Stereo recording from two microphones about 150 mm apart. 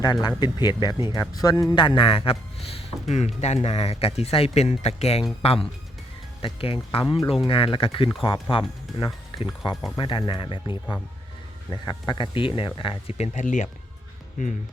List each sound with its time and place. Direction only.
0.0 s speech: 25° left (ahead or behind); by 13.7 s 55° left (ahead or behind)